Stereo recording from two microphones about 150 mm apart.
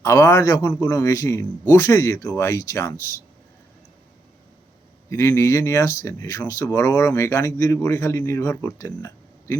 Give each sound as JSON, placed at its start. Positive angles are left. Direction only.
{"t": 0.0, "sound": "speech", "side_deg": 20}
{"t": 5.0, "sound": "speech", "side_deg": 15}